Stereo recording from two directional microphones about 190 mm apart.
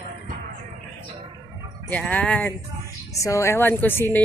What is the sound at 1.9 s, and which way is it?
A woman's voice, 10° left (ahead or behind).